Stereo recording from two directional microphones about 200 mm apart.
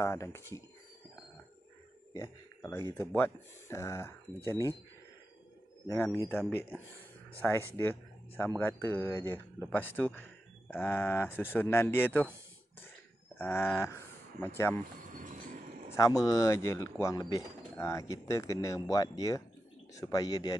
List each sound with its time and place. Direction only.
0.0 s speech: 15° left (ahead or behind)
2.1 s speech: 15° left (ahead or behind)
5.9 s speech: 10° left (ahead or behind)
13.4 s speech: 10° left (ahead or behind)
15.0 s a sound: 40° right (ahead or behind)
15.9 s speech: 15° left (ahead or behind)